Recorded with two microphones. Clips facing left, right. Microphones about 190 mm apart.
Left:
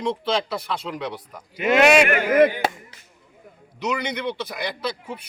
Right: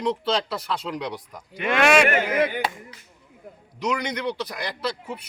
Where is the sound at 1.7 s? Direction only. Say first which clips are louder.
Left 3 dB; 20° left (ahead or behind).